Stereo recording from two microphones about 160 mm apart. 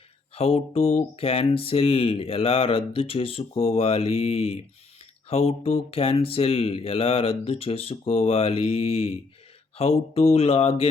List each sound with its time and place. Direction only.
0.3 s speech: 40° left (ahead or behind)